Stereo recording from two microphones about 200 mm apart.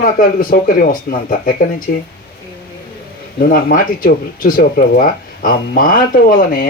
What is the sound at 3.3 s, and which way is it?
Speech, 45° left (ahead or behind).